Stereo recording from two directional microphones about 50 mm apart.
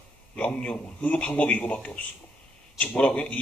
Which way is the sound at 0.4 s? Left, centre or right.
Left.